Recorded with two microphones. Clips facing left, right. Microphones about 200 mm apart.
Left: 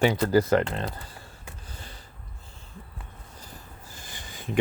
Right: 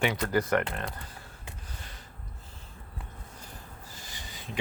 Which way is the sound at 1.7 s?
30° left (ahead or behind).